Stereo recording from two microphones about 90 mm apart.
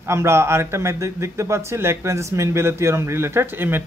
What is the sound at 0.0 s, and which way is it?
Speech, 30° right (ahead or behind).